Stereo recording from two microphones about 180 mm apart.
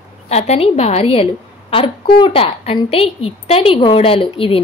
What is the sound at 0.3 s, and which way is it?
A woman's voice, 35° left (ahead or behind).